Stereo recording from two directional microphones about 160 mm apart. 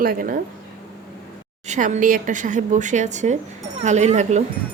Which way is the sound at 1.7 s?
50° right (ahead or behind).